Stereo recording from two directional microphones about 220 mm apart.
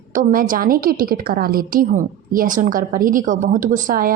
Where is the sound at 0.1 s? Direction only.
35° right (ahead or behind).